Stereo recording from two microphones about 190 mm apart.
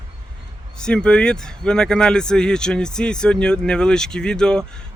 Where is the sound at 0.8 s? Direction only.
5° left (ahead or behind).